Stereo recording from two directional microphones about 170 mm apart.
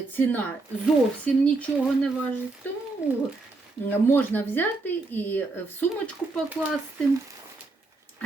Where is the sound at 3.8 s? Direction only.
10° left (ahead or behind).